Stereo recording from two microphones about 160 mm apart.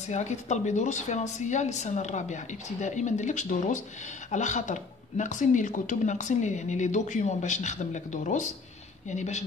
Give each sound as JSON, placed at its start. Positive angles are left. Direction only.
{"t": 0.1, "sound": "speech", "side_deg": 45}